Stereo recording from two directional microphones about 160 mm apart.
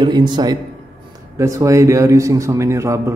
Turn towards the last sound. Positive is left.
turn(degrees=-15)  # may be behind; listen again after turning